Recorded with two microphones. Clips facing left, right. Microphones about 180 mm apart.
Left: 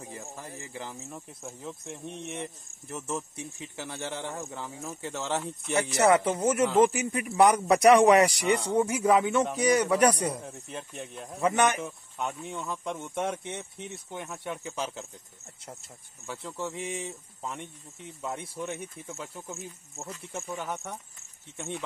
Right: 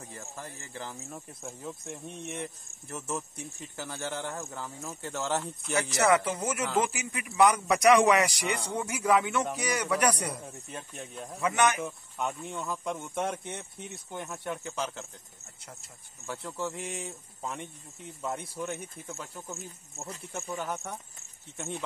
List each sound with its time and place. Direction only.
0.1 s speech: 5° left (ahead or behind)
5.9 s a man's voice: 30° left (ahead or behind)
10.4 s speech: centre (ahead or behind)
11.4 s a man's voice: 35° left (ahead or behind)
11.8 s speech: centre (ahead or behind)
16.3 s speech: centre (ahead or behind)